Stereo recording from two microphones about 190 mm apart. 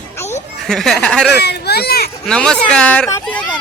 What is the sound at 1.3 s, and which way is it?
Speech, 60° left (ahead or behind).